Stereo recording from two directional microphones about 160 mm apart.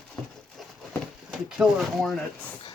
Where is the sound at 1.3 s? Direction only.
5° right (ahead or behind).